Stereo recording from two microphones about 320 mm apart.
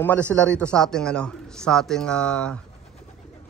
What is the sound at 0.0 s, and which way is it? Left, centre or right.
A man's voice, centre.